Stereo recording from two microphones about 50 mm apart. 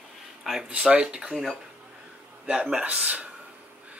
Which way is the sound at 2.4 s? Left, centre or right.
Centre.